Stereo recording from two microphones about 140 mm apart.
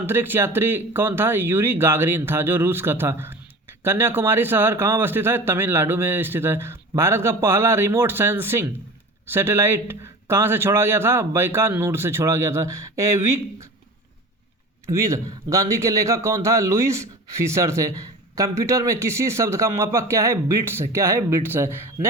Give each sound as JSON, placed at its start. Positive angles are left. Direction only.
{"t": 0.0, "sound": "speech", "side_deg": -15}
{"t": 14.8, "sound": "speech", "side_deg": -20}